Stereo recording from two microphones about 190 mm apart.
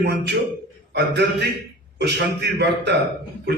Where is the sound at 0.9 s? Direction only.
60° right (ahead or behind).